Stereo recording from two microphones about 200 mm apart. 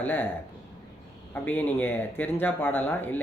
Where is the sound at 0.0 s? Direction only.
10° left (ahead or behind).